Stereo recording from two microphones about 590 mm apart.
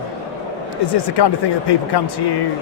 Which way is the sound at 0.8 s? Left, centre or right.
Left.